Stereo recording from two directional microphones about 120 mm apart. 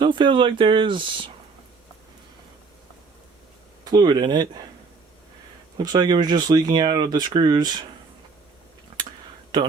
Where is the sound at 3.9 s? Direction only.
35° right (ahead or behind).